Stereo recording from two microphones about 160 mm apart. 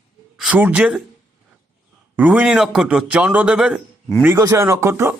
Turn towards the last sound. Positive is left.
turn(degrees=-15)  # may be behind; listen again after turning